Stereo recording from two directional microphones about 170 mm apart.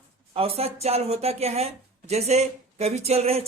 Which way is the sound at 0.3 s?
35° right (ahead or behind).